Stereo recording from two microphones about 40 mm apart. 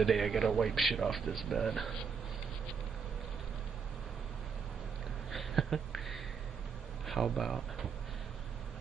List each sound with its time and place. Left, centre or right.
0.0 s a man's voice: centre
5.3 s a sound: centre
7.1 s speech: centre